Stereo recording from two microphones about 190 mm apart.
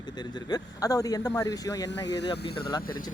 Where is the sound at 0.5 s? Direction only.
20° left (ahead or behind).